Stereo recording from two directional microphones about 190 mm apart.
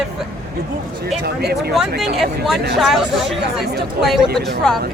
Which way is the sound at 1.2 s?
55° right (ahead or behind).